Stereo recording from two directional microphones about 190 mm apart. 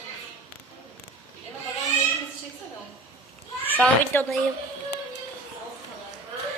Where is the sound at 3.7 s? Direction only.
10° left (ahead or behind).